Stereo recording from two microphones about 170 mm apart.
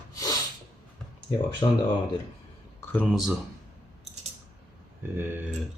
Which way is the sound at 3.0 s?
5° right (ahead or behind).